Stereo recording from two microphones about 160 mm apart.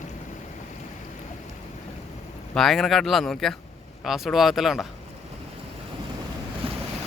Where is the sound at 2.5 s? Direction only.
Centre (ahead or behind).